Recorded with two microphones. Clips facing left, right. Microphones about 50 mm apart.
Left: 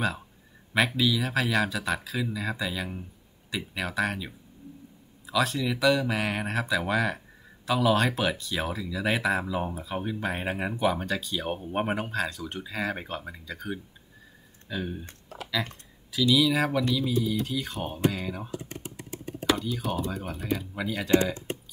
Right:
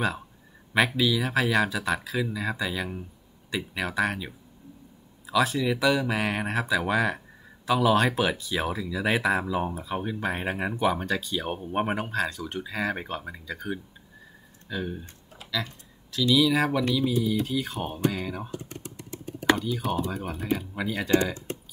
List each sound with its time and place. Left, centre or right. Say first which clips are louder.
0.7 s speech: right 1 dB; centre
15.3 s typing: left 9 dB; left
16.1 s speech: right 1 dB; centre
19.6 s speech: right 2 dB; centre
21.1 s speech: left 1 dB; left